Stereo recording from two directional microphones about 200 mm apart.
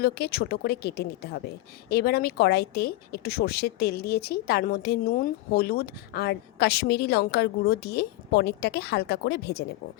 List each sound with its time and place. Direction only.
0.0 s a woman's voice: 50° left (ahead or behind)